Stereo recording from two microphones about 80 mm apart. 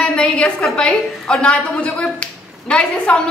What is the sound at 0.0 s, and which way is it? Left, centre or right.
A woman's voice, centre.